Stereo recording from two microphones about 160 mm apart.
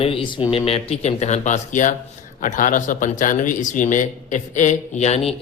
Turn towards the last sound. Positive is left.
turn(degrees=40)  # may be behind; listen again after turning